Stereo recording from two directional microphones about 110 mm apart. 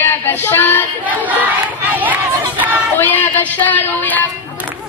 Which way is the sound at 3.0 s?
15° left (ahead or behind).